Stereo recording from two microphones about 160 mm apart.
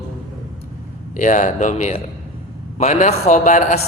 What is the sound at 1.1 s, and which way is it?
A man's voice, 50° left (ahead or behind).